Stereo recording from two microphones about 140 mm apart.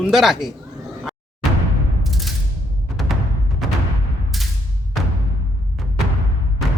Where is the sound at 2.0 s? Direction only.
Centre (ahead or behind).